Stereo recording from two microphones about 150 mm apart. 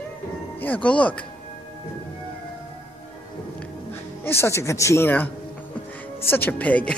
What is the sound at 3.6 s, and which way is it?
Music, 15° left (ahead or behind).